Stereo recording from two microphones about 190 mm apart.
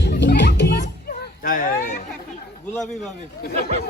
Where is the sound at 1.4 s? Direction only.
45° left (ahead or behind).